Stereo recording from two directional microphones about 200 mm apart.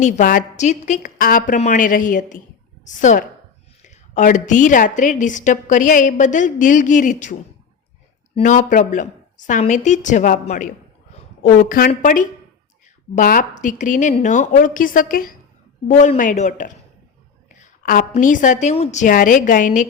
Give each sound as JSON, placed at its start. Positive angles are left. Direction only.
{"t": 0.0, "sound": "a woman's voice", "side_deg": 45}
{"t": 8.4, "sound": "a woman's voice", "side_deg": 40}